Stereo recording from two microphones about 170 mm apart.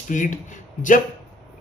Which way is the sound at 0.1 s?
50° left (ahead or behind).